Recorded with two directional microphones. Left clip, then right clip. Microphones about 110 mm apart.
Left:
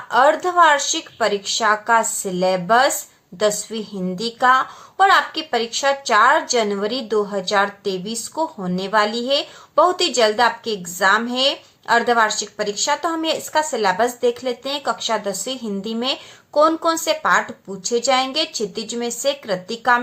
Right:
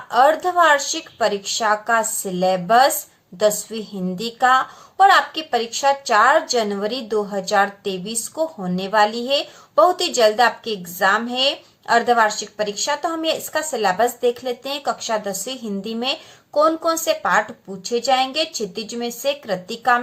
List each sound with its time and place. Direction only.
0.1 s a woman's voice: 25° left (ahead or behind)
13.6 s a woman's voice: 20° left (ahead or behind)